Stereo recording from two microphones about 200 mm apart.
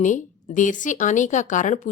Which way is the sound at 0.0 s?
40° left (ahead or behind).